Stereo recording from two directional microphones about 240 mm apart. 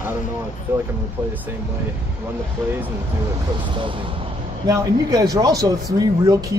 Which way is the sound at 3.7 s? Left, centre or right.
Right.